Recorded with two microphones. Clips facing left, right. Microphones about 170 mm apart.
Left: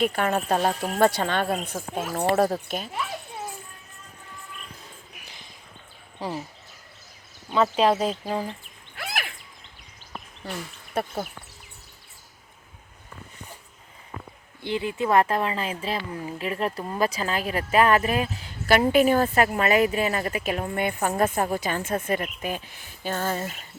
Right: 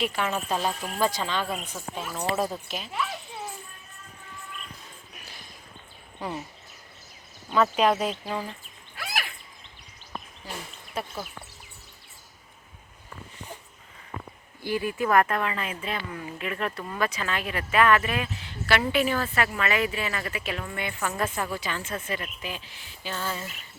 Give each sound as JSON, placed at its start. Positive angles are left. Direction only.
{"t": 0.0, "sound": "a woman's voice", "side_deg": 50}
{"t": 0.9, "sound": "speech", "side_deg": 65}
{"t": 6.1, "sound": "speech", "side_deg": 30}
{"t": 7.5, "sound": "speech", "side_deg": 30}
{"t": 10.4, "sound": "speech", "side_deg": 65}
{"t": 14.6, "sound": "a woman's voice", "side_deg": 20}